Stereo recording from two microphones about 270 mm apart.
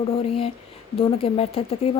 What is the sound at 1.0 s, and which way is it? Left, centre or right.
Speech, left.